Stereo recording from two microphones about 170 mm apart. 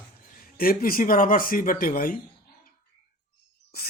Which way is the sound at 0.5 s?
60° left (ahead or behind).